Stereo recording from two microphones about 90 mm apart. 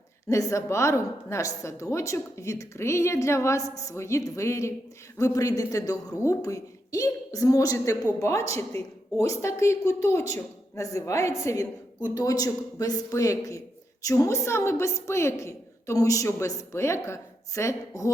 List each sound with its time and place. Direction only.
0.3 s a woman's voice: 35° left (ahead or behind)